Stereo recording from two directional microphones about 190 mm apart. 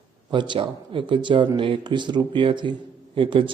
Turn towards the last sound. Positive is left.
turn(degrees=-25)  # may be behind; listen again after turning